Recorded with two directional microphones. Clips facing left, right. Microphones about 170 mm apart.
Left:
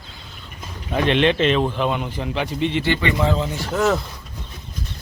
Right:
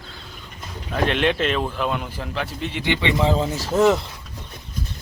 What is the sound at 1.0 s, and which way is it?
Speech, 5° right (ahead or behind).